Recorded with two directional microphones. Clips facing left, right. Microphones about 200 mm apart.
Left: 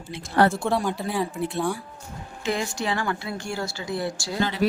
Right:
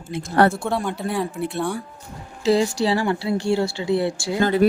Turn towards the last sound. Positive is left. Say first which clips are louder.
# right 7 dB
turn(degrees=-25)  # may be behind; listen again after turning